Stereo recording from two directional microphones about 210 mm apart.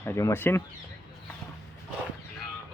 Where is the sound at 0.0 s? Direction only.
15° left (ahead or behind).